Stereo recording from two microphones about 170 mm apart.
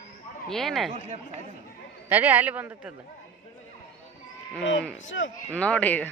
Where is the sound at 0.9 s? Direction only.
40° right (ahead or behind).